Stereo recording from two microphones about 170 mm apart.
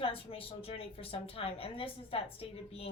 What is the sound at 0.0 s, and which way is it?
A woman's voice, 30° left (ahead or behind).